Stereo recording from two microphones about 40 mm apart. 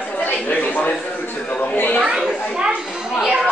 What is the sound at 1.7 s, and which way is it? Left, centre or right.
Speech, left.